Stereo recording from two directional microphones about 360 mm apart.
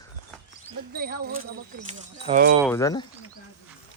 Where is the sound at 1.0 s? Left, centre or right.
Right.